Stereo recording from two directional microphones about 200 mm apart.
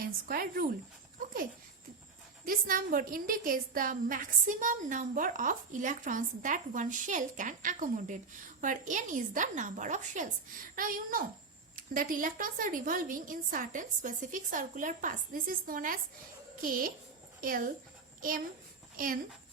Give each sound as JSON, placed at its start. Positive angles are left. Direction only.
{"t": 0.0, "sound": "speech", "side_deg": -45}
{"t": 1.2, "sound": "a sound", "side_deg": -45}
{"t": 2.4, "sound": "a woman's voice", "side_deg": -45}
{"t": 18.9, "sound": "a woman's voice", "side_deg": -45}